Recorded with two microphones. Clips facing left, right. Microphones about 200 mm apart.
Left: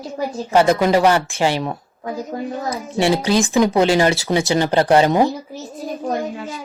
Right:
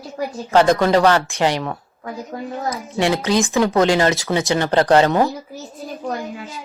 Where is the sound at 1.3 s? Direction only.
30° left (ahead or behind).